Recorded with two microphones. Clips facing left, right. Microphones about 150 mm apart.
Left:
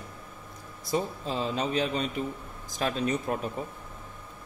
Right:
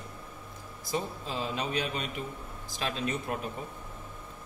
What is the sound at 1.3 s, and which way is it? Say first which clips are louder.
A man's voice: left 4 dB; 40° left (ahead or behind).